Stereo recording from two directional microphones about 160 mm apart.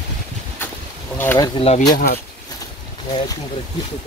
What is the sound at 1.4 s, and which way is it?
Speech, 35° left (ahead or behind).